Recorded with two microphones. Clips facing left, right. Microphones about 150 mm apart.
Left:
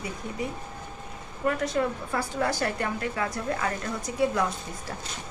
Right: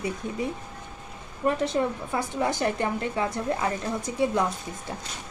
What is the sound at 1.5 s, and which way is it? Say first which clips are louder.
A woman's voice: right 2 dB; 25° right (ahead or behind).